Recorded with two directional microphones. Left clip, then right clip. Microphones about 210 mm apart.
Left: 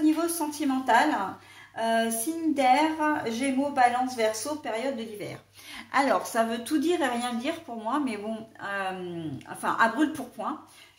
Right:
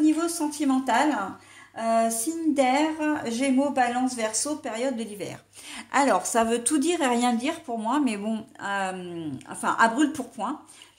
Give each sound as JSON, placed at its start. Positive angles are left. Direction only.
{"t": 0.0, "sound": "a woman's voice", "side_deg": -40}